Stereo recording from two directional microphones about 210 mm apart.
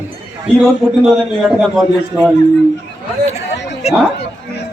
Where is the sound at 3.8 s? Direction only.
30° left (ahead or behind).